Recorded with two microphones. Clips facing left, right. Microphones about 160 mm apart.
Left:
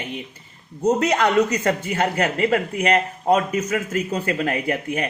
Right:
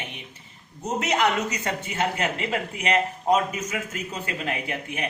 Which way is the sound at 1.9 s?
50° left (ahead or behind).